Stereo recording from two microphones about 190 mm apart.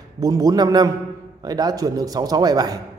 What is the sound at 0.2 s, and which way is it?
A man's voice, 20° right (ahead or behind).